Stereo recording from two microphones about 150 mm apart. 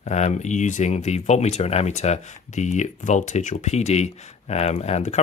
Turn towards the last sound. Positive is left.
turn(degrees=45)  # may be behind; listen again after turning